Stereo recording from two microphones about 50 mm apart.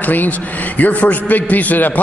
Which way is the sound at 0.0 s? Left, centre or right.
Left.